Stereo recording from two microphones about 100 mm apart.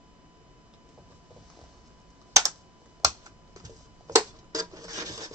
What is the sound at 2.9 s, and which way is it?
Computer keyboard, 40° right (ahead or behind).